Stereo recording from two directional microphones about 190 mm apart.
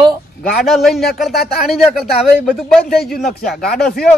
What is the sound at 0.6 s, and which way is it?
Speech, centre (ahead or behind).